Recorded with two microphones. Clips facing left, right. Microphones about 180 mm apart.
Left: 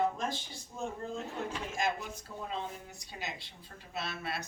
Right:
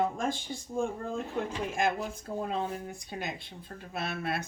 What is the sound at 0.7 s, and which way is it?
Speech, 50° right (ahead or behind).